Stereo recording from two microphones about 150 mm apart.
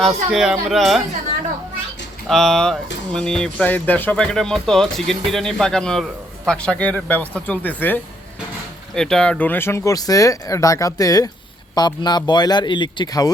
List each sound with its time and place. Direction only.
0.3 s speech: centre (ahead or behind)
2.2 s speech: centre (ahead or behind); by 13.3 s 30° left (ahead or behind)